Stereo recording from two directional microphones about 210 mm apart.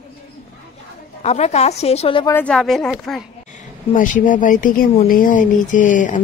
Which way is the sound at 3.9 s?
40° left (ahead or behind).